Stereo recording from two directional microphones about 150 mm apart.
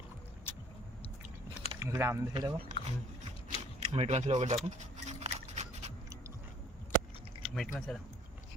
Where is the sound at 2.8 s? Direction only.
35° left (ahead or behind).